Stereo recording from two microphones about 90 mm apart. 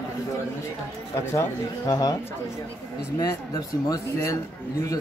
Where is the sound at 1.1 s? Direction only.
30° left (ahead or behind).